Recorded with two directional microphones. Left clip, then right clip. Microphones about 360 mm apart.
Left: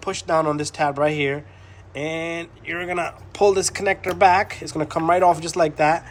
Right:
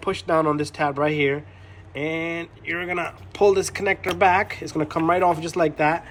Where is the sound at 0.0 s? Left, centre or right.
Centre.